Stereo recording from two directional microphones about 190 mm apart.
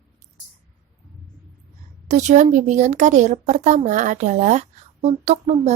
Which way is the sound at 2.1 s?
40° right (ahead or behind).